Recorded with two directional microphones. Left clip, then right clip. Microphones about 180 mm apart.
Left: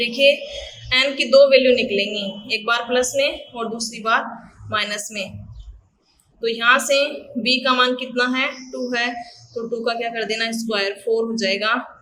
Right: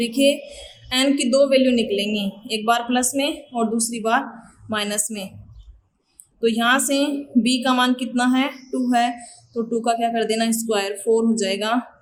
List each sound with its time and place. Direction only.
0.0 s a man's voice: 35° right (ahead or behind)
6.4 s a man's voice: 40° right (ahead or behind)